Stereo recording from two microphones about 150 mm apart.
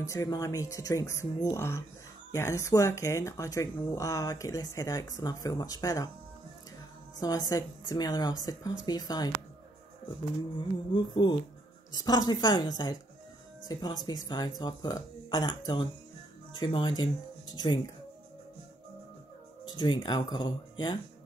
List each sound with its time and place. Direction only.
0.0 s speech: 20° left (ahead or behind)
7.2 s speech: 25° left (ahead or behind)
10.9 s speech: 30° left (ahead or behind)
19.7 s speech: 30° left (ahead or behind)